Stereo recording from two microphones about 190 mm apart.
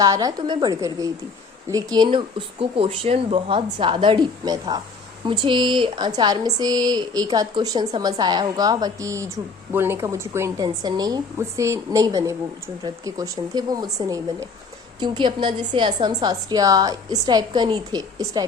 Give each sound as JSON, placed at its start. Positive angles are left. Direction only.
{"t": 0.0, "sound": "a woman's voice", "side_deg": -20}